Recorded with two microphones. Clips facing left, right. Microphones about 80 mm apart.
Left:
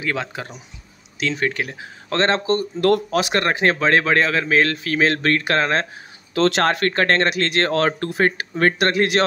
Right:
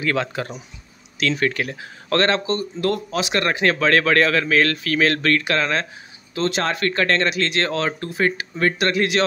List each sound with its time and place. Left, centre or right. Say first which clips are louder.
0.0 s speech: right 3 dB; centre
2.4 s speech: left 4 dB; left
3.4 s speech: left 1 dB; left
6.3 s speech: left 4 dB; left
6.6 s speech: left 3 dB; left